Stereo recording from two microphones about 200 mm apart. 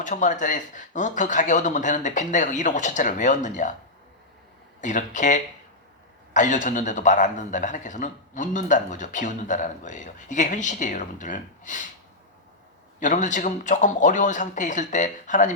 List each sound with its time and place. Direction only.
0.0 s a man's voice: 40° left (ahead or behind)
4.8 s a man's voice: 40° left (ahead or behind)
13.0 s a man's voice: 40° left (ahead or behind)